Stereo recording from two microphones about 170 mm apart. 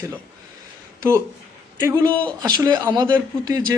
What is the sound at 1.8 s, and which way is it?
A man's voice, 15° right (ahead or behind).